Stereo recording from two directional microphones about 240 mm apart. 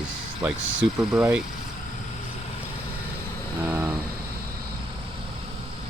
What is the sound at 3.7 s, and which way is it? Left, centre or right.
Vehicle, centre.